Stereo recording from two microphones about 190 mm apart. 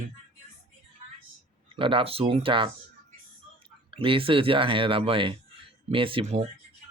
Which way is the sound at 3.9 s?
30° right (ahead or behind).